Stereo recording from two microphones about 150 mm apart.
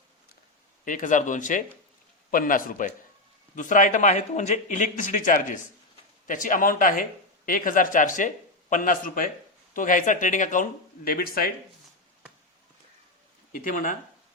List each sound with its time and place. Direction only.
0.9 s a man's voice: 60° left (ahead or behind); by 11.5 s 75° left (ahead or behind)
13.5 s speech: 65° left (ahead or behind)